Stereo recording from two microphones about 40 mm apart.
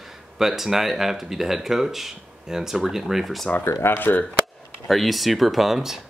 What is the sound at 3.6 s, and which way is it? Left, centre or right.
Speech, left.